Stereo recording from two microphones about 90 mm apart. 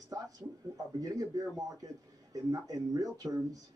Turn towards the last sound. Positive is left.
turn(degrees=-40)  # may be behind; listen again after turning